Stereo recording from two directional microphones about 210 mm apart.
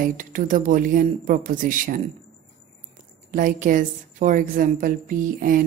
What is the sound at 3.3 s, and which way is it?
A woman's voice, 40° right (ahead or behind).